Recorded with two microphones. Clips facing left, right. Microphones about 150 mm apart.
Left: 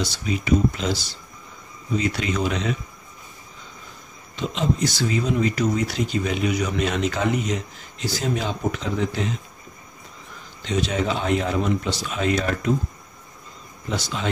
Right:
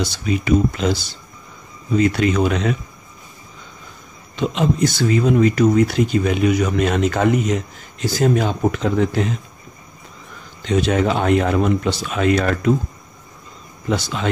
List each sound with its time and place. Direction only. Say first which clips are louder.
0.0 s speech: right 5 dB; 60° right (ahead or behind)
4.4 s speech: right 5 dB; 55° right (ahead or behind)
10.6 s speech: right 6 dB; 55° right (ahead or behind)
13.8 s speech: right 5 dB; 60° right (ahead or behind)